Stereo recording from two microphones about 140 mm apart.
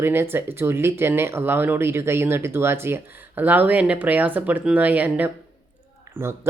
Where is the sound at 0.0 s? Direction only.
15° right (ahead or behind).